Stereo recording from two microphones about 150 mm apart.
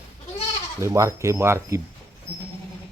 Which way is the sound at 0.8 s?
20° right (ahead or behind).